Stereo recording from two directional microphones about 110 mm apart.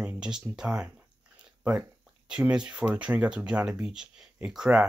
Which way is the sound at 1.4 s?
10° right (ahead or behind).